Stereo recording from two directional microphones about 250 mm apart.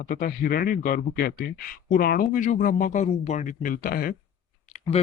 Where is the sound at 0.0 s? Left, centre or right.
Left.